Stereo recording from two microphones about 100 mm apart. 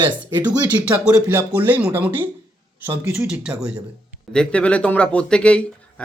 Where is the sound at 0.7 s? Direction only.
15° right (ahead or behind).